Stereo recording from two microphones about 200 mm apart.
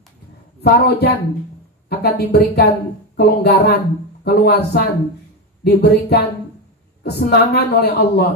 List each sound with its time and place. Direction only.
0.6 s a man's voice: 55° left (ahead or behind)